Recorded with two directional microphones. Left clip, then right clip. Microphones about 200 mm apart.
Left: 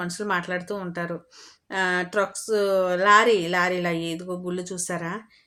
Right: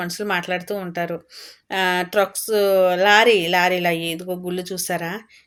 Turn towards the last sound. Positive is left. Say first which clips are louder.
# right 5 dB
turn(degrees=0)  # may be behind; listen again after turning